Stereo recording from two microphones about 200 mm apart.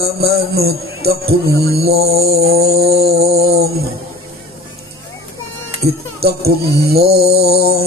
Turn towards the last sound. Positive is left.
turn(degrees=-50)  # may be behind; listen again after turning